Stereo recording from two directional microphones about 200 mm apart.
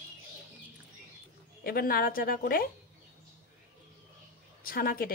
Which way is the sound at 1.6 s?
45° left (ahead or behind).